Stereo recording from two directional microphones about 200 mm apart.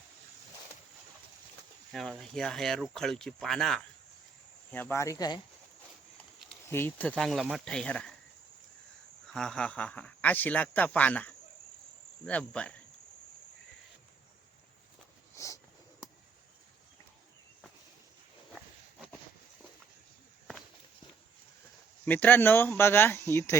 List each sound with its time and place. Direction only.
1.9 s speech: centre (ahead or behind); by 5.4 s 20° left (ahead or behind)
6.7 s speech: 10° left (ahead or behind)
9.3 s speech: 5° left (ahead or behind)
15.4 s a sound: 15° left (ahead or behind)
18.5 s walk: centre (ahead or behind)
22.0 s speech: 10° left (ahead or behind)